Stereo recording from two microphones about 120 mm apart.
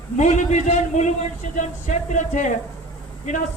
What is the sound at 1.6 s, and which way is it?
Speech, 90° left.